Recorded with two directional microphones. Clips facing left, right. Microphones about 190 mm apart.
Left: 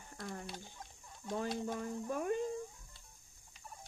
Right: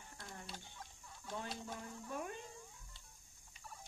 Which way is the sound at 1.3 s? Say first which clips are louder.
Left 8 dB; 50° left (ahead or behind).